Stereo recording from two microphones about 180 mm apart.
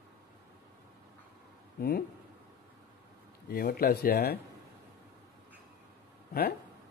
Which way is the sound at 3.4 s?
60° left (ahead or behind).